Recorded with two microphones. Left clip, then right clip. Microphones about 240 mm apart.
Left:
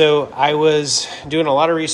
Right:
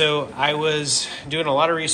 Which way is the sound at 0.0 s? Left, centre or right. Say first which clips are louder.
Left 6 dB; left.